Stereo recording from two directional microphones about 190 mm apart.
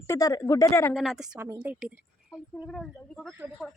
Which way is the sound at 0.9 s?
Centre (ahead or behind).